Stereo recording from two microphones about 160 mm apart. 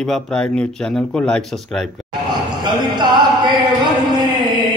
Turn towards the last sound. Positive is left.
turn(degrees=-30)  # may be behind; listen again after turning